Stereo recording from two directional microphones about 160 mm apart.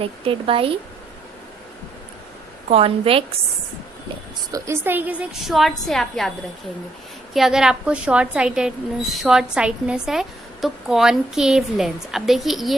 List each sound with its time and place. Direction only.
0.0 s speech: 35° right (ahead or behind)
2.6 s speech: 40° right (ahead or behind)
4.5 s a woman's voice: 15° right (ahead or behind); by 6.3 s centre (ahead or behind)
7.3 s speech: 5° right (ahead or behind)